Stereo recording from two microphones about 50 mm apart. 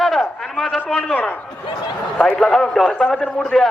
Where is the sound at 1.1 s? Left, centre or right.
Left.